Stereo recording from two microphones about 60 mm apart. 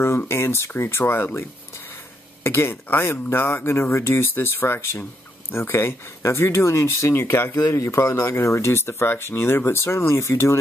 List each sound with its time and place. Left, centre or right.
0.3 s speech: left
2.4 s speech: left